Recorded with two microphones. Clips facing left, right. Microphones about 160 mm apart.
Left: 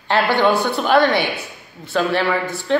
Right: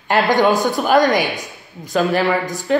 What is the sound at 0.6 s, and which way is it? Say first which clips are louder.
Speech: right 1 dB; 10° right (ahead or behind).